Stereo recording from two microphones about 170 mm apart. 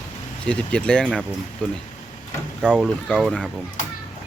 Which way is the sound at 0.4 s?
5° left (ahead or behind).